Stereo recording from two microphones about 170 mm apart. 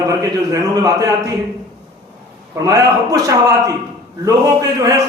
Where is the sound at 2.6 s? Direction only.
20° right (ahead or behind).